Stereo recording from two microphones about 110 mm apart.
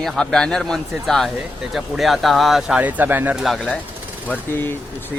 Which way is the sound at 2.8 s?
15° right (ahead or behind).